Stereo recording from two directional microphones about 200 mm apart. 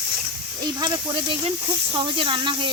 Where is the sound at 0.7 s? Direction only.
20° right (ahead or behind).